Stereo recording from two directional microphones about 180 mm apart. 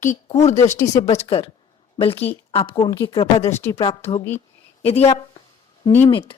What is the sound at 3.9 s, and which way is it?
Speech, 30° left (ahead or behind).